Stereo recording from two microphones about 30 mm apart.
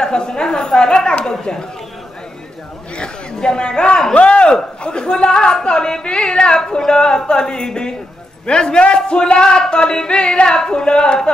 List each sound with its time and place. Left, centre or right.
0.0 s speech: left
3.4 s a man's voice: left